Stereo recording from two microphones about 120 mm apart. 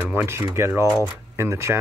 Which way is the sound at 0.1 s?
20° right (ahead or behind).